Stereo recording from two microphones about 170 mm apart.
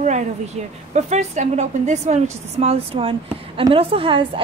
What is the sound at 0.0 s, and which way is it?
A woman's voice, 45° right (ahead or behind).